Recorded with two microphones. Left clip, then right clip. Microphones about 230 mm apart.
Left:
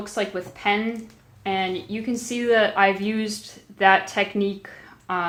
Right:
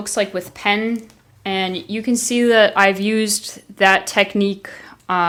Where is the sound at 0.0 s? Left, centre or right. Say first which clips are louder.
Right 6 dB; right.